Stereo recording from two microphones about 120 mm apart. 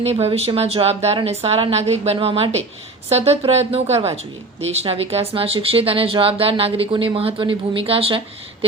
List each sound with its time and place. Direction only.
0.0 s a woman's voice: 60° right (ahead or behind)